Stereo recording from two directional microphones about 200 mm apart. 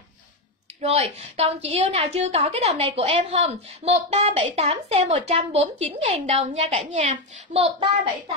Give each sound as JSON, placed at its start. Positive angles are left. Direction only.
{"t": 0.7, "sound": "a woman's voice", "side_deg": -30}